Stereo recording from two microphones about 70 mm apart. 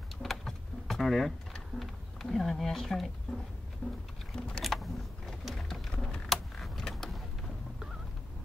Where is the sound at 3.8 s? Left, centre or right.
Left.